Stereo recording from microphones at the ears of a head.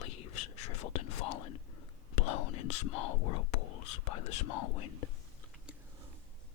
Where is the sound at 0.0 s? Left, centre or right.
Left.